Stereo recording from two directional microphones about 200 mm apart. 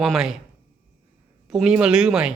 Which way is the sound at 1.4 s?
Centre (ahead or behind).